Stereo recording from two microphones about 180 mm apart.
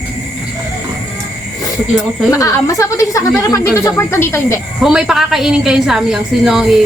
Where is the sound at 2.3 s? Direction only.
15° left (ahead or behind).